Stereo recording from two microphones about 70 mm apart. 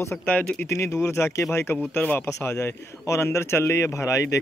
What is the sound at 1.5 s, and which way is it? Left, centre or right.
Speech, left.